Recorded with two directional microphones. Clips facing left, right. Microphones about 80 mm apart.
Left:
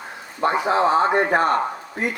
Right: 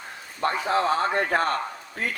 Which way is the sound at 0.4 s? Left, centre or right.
Left.